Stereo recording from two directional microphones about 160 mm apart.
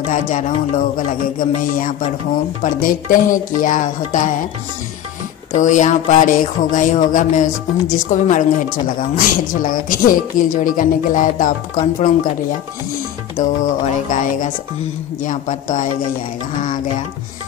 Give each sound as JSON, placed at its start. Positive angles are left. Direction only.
{"t": 0.1, "sound": "a woman's voice", "side_deg": 55}
{"t": 5.5, "sound": "a woman's voice", "side_deg": 50}
{"t": 13.4, "sound": "speech", "side_deg": 50}
{"t": 15.2, "sound": "speech", "side_deg": 55}